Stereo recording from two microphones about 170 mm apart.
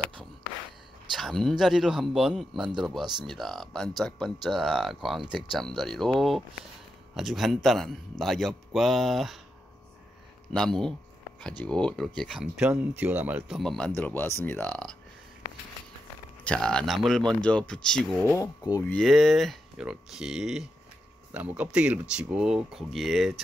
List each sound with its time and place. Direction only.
1.1 s speech: centre (ahead or behind)
10.5 s speech: 5° left (ahead or behind)
16.4 s speech: 5° left (ahead or behind)
18.3 s speech: 20° left (ahead or behind)
18.9 s speech: centre (ahead or behind)